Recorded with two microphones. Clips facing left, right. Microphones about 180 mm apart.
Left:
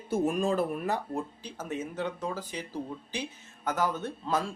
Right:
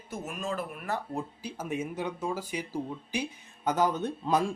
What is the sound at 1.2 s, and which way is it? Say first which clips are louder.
Speech: even; 10° right (ahead or behind).